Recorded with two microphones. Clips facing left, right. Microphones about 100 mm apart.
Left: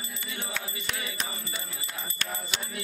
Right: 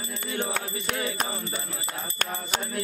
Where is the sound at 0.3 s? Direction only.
50° right (ahead or behind).